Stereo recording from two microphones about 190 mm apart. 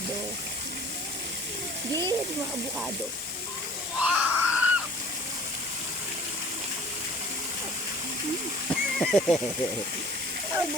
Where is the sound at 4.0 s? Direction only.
5° right (ahead or behind).